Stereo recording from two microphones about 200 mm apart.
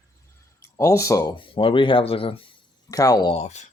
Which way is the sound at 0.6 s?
15° left (ahead or behind).